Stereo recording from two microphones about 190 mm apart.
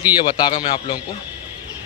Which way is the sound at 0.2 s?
25° left (ahead or behind).